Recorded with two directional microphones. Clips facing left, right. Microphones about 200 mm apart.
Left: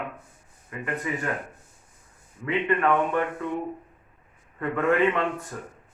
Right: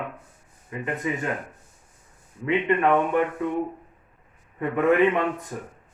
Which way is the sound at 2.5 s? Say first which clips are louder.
Right 2 dB; 20° right (ahead or behind).